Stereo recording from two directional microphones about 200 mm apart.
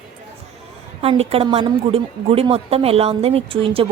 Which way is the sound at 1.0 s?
30° right (ahead or behind).